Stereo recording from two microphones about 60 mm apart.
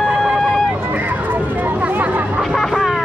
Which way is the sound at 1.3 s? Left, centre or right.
Right.